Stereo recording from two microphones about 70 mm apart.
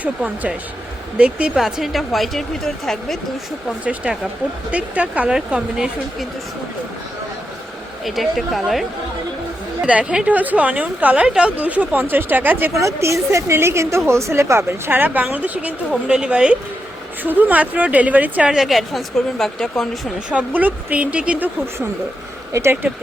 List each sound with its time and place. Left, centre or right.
1.2 s speech: centre
1.5 s speech: centre
3.8 s speech: centre
8.0 s speech: centre
9.8 s a woman's voice: centre
12.7 s a woman's voice: right
14.8 s a woman's voice: right
17.2 s a woman's voice: right
18.5 s speech: centre
20.3 s a woman's voice: right